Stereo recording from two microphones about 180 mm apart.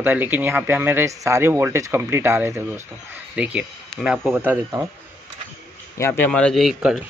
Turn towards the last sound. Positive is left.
turn(degrees=0)  # may be behind; listen again after turning